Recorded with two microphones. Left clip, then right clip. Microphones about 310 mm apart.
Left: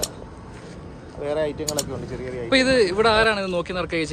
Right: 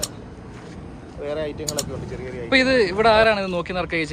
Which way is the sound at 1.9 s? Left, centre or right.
Left.